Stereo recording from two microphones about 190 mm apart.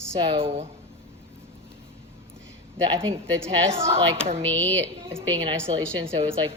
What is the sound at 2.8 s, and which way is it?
Speech, 30° right (ahead or behind).